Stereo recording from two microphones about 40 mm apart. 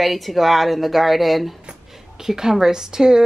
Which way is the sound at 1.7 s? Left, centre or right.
Centre.